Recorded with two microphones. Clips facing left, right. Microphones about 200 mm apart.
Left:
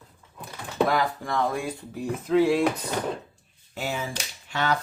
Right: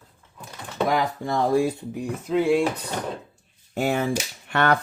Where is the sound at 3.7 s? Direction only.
55° right (ahead or behind).